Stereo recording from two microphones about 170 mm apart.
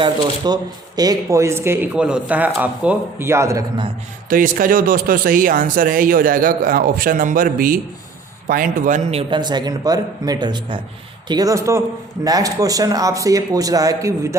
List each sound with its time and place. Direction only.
0.0 s speech: 25° right (ahead or behind)
4.3 s a man's voice: 55° right (ahead or behind); by 14.3 s 20° right (ahead or behind)